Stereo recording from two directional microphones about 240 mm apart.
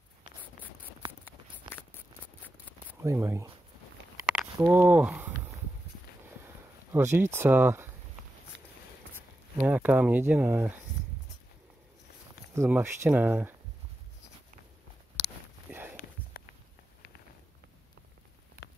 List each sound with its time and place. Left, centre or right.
3.0 s speech: centre
4.2 s a sound: centre
4.6 s speech: centre
6.9 s speech: centre
9.6 s speech: centre
12.5 s speech: centre
15.7 s walk: centre